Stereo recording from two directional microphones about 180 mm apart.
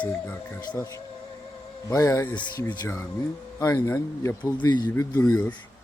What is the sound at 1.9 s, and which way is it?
Speech, 15° left (ahead or behind).